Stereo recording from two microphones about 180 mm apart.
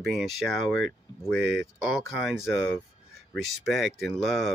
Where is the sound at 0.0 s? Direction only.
Centre (ahead or behind).